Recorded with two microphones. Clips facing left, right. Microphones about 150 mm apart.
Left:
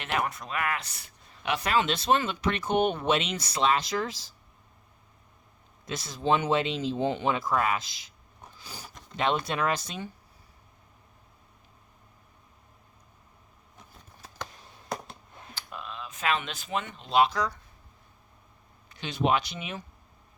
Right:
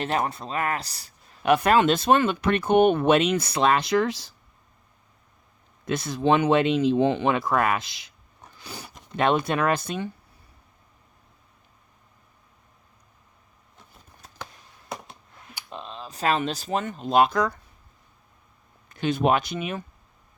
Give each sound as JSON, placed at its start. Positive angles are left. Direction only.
{"t": 0.0, "sound": "speech", "side_deg": -35}
{"t": 1.5, "sound": "speech", "side_deg": -50}
{"t": 5.8, "sound": "speech", "side_deg": -60}
{"t": 8.5, "sound": "a sound", "side_deg": -65}
{"t": 9.1, "sound": "speech", "side_deg": -55}
{"t": 14.8, "sound": "a sound", "side_deg": 0}
{"t": 15.7, "sound": "speech", "side_deg": -30}
{"t": 18.9, "sound": "speech", "side_deg": -50}